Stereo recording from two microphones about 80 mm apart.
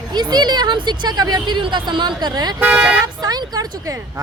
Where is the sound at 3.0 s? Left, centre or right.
Right.